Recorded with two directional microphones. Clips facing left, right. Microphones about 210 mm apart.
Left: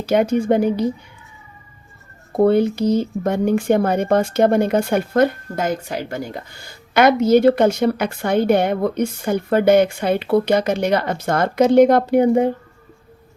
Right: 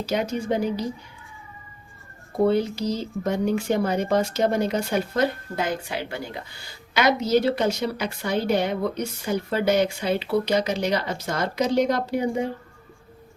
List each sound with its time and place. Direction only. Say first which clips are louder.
0.0 s speech: left 8 dB; 55° left (ahead or behind)
2.4 s speech: left 6 dB; 55° left (ahead or behind)